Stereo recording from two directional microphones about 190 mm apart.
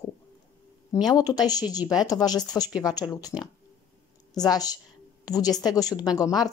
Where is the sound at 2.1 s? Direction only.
20° left (ahead or behind).